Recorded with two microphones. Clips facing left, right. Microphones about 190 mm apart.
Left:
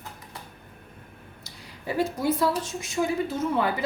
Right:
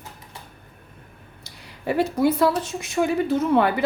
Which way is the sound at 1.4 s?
65° right (ahead or behind).